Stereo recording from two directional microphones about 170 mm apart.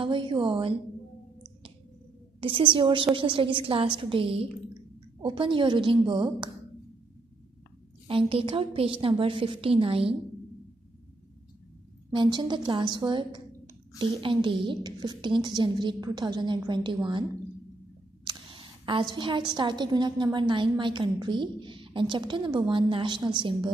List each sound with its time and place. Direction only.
0.0 s a woman's voice: 30° right (ahead or behind)
2.4 s a woman's voice: 30° right (ahead or behind)
8.1 s a woman's voice: 30° right (ahead or behind)
12.1 s a woman's voice: 25° right (ahead or behind)
18.2 s a woman's voice: 30° right (ahead or behind)